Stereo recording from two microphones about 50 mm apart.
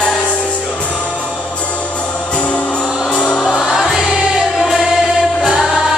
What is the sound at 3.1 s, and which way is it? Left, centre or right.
Music, centre.